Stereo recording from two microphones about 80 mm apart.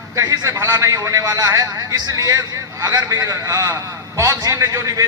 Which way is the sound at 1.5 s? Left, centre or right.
Right.